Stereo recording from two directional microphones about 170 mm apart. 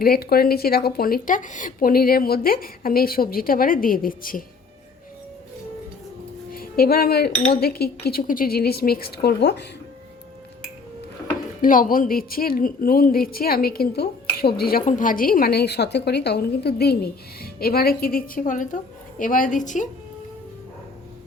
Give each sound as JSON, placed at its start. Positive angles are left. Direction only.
{"t": 0.0, "sound": "a woman's voice", "side_deg": 60}
{"t": 6.5, "sound": "music", "side_deg": 60}
{"t": 7.5, "sound": "a woman's voice", "side_deg": 65}
{"t": 11.6, "sound": "a woman's voice", "side_deg": 55}